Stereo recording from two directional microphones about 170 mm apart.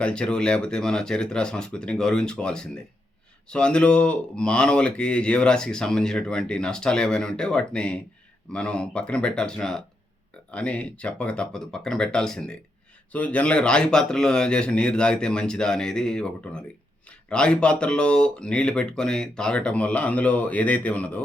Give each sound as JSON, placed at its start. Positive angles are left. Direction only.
{"t": 0.0, "sound": "speech", "side_deg": 5}